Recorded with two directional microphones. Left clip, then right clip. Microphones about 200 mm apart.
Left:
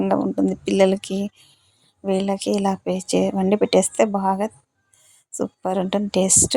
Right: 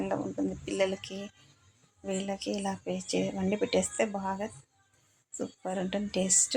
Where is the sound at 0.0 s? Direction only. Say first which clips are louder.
Left 12 dB; 45° left (ahead or behind).